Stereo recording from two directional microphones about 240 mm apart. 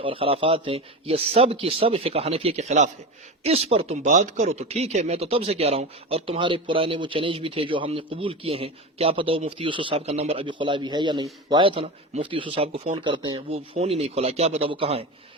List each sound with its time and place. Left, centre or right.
0.0 s speech: right